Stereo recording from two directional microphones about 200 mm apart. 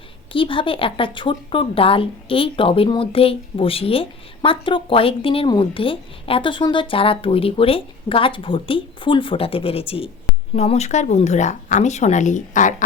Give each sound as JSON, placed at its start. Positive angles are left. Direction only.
{"t": 0.3, "sound": "speech", "side_deg": 25}